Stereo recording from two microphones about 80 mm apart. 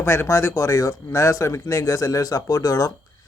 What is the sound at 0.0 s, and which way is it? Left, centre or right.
Speech, left.